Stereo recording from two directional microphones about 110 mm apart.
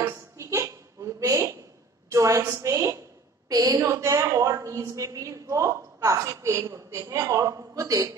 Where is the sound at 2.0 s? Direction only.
30° right (ahead or behind).